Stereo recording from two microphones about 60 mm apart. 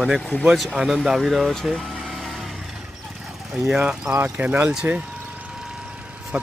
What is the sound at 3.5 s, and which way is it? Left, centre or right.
Speech, centre.